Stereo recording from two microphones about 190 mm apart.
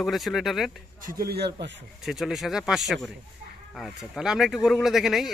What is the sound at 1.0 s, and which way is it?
Speech, 50° right (ahead or behind).